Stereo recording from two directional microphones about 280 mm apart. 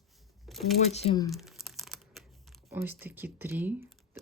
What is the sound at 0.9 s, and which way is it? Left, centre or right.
Speech, left.